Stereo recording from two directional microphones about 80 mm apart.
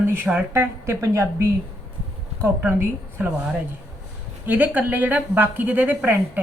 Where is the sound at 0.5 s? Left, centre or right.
Right.